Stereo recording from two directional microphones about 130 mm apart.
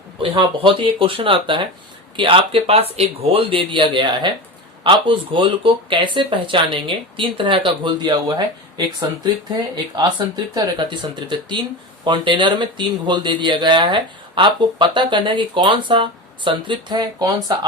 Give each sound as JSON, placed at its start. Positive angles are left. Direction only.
{"t": 0.2, "sound": "speech", "side_deg": -40}